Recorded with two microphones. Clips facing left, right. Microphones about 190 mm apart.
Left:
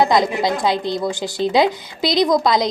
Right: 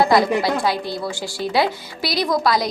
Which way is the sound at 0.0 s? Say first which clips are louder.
Even; 20° left (ahead or behind).